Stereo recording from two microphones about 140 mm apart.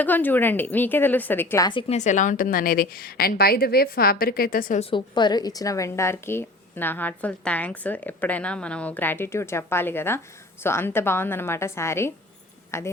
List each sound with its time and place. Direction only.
0.0 s a woman's voice: 15° left (ahead or behind)
1.9 s a woman's voice: 60° left (ahead or behind); by 4.8 s 80° left
4.8 s a woman's voice: 35° left (ahead or behind); by 12.9 s 20° left (ahead or behind)